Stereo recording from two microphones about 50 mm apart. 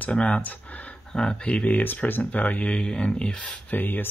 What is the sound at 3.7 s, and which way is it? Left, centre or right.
Speech, left.